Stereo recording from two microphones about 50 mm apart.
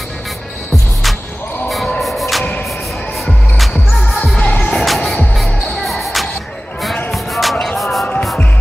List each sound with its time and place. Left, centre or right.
2.0 s music: centre
4.4 s music: left
4.7 s music: centre
7.8 s basketball bounce: centre